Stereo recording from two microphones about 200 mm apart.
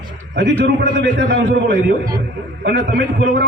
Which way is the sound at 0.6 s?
60° right (ahead or behind).